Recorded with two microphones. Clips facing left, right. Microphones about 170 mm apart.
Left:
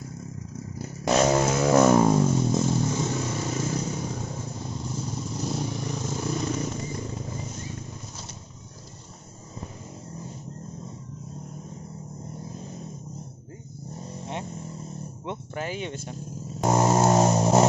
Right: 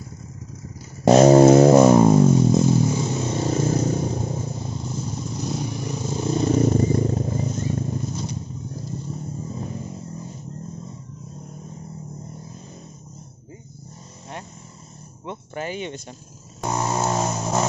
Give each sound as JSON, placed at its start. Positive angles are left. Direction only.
{"t": 1.0, "sound": "vehicle", "side_deg": -35}
{"t": 1.8, "sound": "vehicle", "side_deg": -15}
{"t": 3.2, "sound": "vehicle", "side_deg": -30}
{"t": 5.4, "sound": "vehicle", "side_deg": 0}
{"t": 5.9, "sound": "vehicle", "side_deg": -20}
{"t": 6.3, "sound": "vehicle", "side_deg": -35}
{"t": 15.5, "sound": "a sound", "side_deg": 0}
{"t": 16.6, "sound": "vehicle", "side_deg": 45}